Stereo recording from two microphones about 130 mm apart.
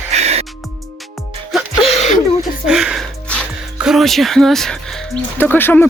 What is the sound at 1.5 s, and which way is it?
Music, centre (ahead or behind).